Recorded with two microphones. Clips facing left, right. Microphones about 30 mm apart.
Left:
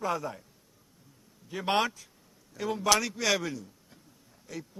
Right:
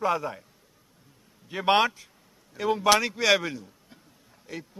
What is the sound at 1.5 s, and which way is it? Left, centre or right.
A man's voice, right.